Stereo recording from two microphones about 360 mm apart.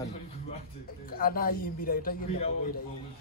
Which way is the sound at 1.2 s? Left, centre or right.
Left.